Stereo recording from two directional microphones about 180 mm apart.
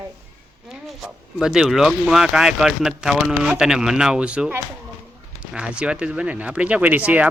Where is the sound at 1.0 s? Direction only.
5° right (ahead or behind).